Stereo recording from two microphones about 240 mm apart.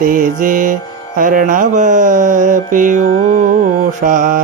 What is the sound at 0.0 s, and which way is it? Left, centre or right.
Music, right.